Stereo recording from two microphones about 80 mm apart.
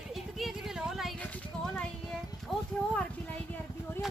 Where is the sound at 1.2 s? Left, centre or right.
Centre.